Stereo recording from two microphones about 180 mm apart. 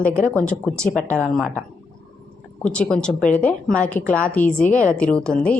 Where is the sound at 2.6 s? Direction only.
5° left (ahead or behind).